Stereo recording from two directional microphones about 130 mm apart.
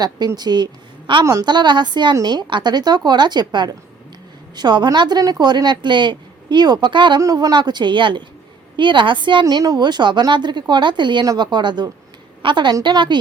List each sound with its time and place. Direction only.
0.3 s a woman's voice: 35° right (ahead or behind)
1.2 s a woman's voice: 25° right (ahead or behind)
7.2 s a woman's voice: 25° right (ahead or behind)